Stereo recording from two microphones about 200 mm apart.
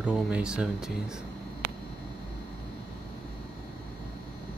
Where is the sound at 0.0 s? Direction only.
5° right (ahead or behind).